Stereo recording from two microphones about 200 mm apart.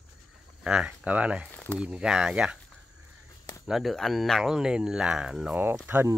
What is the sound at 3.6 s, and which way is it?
Speech, centre (ahead or behind).